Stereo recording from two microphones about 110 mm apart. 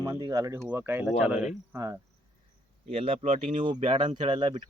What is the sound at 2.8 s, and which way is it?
Speech, 65° right (ahead or behind).